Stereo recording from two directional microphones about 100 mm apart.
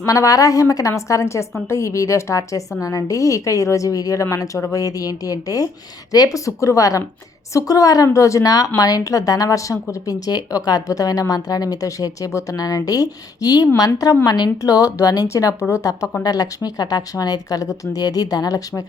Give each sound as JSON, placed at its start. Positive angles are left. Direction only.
{"t": 0.0, "sound": "a woman's voice", "side_deg": 35}